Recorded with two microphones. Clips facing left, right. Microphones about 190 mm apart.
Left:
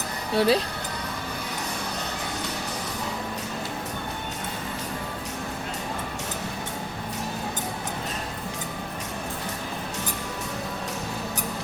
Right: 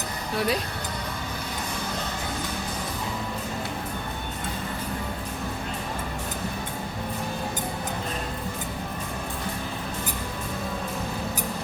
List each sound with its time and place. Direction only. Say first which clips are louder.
0.3 s speech: left 5 dB; 30° left (ahead or behind)